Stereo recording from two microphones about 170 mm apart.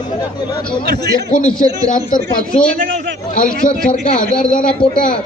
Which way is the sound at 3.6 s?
50° left (ahead or behind).